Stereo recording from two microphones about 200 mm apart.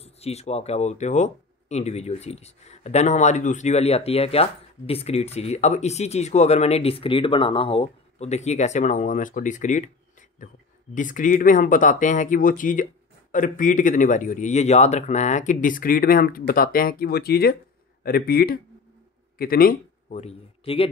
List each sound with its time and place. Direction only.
0.0 s speech: 30° left (ahead or behind)
11.0 s speech: 40° left (ahead or behind)
20.2 s a man's voice: 30° left (ahead or behind)